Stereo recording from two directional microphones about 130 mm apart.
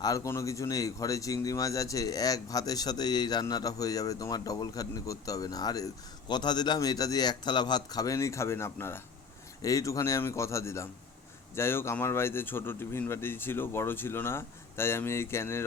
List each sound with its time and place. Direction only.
0.0 s a man's voice: 25° left (ahead or behind)